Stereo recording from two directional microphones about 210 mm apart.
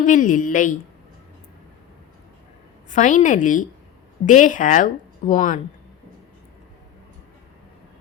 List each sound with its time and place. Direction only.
0.0 s a woman's voice: 40° left (ahead or behind)
2.9 s a woman's voice: 35° left (ahead or behind)